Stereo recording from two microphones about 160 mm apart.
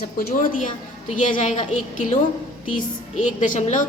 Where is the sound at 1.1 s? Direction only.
50° left (ahead or behind).